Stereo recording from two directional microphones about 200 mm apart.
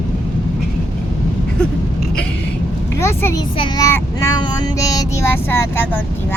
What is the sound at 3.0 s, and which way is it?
Child singing, 15° left (ahead or behind).